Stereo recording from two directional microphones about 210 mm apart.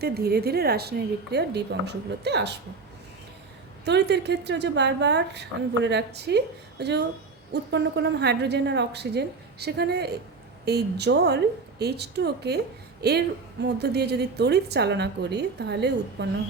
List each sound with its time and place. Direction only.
0.0 s a woman's voice: 50° right (ahead or behind)
3.8 s a woman's voice: 55° right (ahead or behind)